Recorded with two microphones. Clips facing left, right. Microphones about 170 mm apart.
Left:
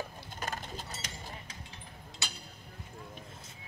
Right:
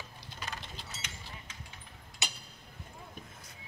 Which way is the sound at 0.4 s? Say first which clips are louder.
Left 5 dB; 45° left (ahead or behind).